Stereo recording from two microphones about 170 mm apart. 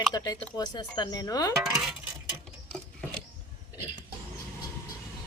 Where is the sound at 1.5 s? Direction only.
Centre (ahead or behind).